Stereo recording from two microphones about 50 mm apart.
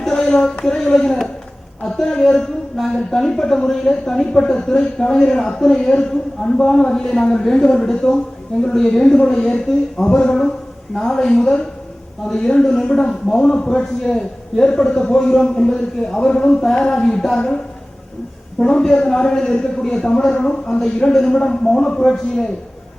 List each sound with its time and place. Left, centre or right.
0.0 s a sound: centre
0.6 s a man's voice: centre
18.6 s a man's voice: centre